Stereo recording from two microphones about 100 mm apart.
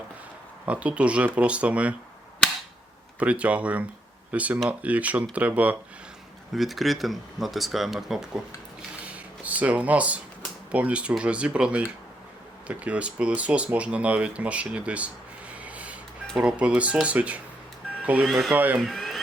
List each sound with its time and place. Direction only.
0.6 s speech: 15° right (ahead or behind)
3.2 s speech: 15° right (ahead or behind)
6.5 s speech: centre (ahead or behind)
9.0 s a sound: 15° right (ahead or behind)
10.7 s speech: 15° right (ahead or behind)
18.3 s speech: centre (ahead or behind)
18.5 s speech: 15° right (ahead or behind)
18.8 s a sound: centre (ahead or behind)